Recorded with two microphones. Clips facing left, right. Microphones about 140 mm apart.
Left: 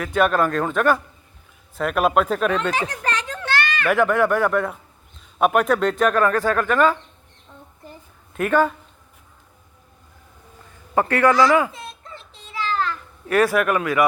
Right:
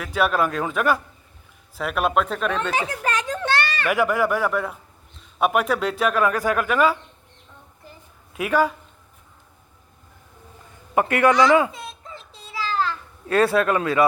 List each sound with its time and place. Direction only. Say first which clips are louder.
0.0 s speech: left 3 dB; centre (ahead or behind)
2.8 s a sound: right 1 dB; 10° right (ahead or behind)
3.6 s a sound: left 1 dB; 30° right (ahead or behind)
3.8 s speech: left 3 dB; 5° right (ahead or behind)
8.3 s speech: left 2 dB; 5° right (ahead or behind)
10.9 s speech: left 1 dB; 20° right (ahead or behind)
12.5 s children playing: left 1 dB; 25° right (ahead or behind)